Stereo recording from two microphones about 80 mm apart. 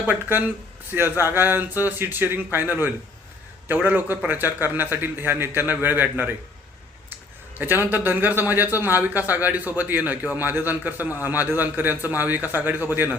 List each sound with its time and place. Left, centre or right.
0.1 s a man's voice: right
3.8 s a man's voice: right
7.6 s a man's voice: right